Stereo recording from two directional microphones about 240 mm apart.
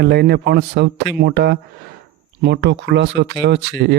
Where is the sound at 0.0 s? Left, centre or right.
Right.